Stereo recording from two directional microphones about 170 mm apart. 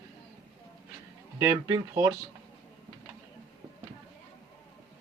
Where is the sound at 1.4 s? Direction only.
20° right (ahead or behind).